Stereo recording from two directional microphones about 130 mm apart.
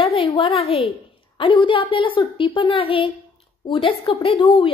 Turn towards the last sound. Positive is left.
turn(degrees=45)  # may be behind; listen again after turning